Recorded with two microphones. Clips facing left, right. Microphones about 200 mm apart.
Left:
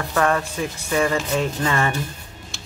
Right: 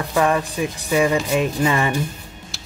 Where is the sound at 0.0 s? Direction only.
15° right (ahead or behind).